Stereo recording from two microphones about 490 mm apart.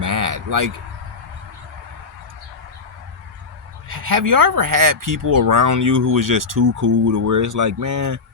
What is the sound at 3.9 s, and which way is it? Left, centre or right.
Speech, right.